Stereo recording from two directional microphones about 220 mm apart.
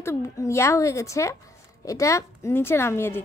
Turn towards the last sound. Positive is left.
turn(degrees=10)  # may be behind; listen again after turning